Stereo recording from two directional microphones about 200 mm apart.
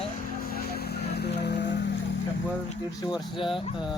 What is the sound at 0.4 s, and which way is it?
Vehicle, 50° left (ahead or behind).